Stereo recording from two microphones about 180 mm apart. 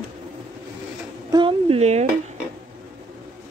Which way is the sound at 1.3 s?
25° right (ahead or behind).